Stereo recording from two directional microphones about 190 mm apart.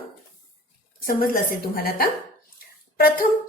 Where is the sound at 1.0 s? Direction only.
50° left (ahead or behind).